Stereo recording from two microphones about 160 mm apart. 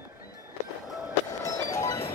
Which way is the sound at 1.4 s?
20° left (ahead or behind).